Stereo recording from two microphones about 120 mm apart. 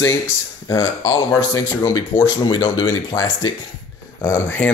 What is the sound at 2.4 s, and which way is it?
Speech, 35° left (ahead or behind).